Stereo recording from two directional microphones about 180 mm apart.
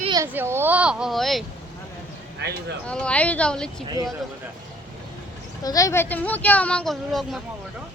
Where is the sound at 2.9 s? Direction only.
5° left (ahead or behind).